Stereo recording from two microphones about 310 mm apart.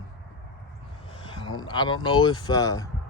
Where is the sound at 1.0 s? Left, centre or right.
Centre.